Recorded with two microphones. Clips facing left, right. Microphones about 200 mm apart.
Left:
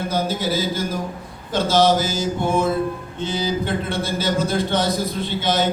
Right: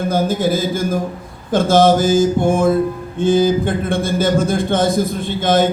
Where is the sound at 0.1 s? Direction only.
50° right (ahead or behind).